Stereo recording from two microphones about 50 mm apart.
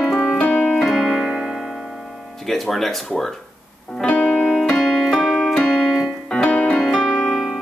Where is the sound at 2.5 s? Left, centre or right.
Centre.